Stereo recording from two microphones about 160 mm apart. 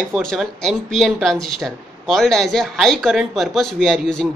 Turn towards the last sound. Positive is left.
turn(degrees=5)  # may be behind; listen again after turning